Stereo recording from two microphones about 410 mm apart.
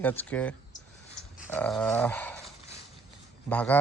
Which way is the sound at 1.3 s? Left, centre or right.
Centre.